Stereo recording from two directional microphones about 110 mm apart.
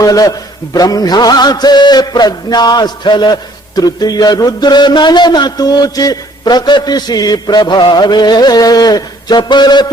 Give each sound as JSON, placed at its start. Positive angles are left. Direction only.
{"t": 0.0, "sound": "a man's voice", "side_deg": 35}